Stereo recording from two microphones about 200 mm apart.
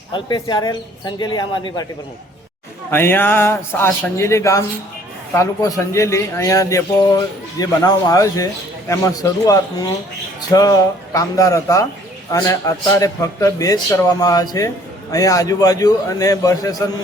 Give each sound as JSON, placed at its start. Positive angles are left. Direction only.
{"t": 0.1, "sound": "speech", "side_deg": 20}
{"t": 2.9, "sound": "a man's voice", "side_deg": 10}